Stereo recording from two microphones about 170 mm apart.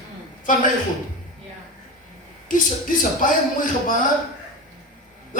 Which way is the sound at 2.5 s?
50° left (ahead or behind).